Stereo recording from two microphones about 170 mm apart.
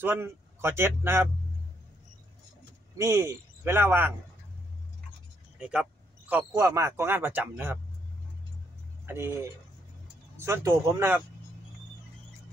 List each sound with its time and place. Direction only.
0.0 s speech: 15° right (ahead or behind)
3.0 s speech: 15° right (ahead or behind)
5.6 s speech: 5° right (ahead or behind)
9.0 s speech: 15° right (ahead or behind)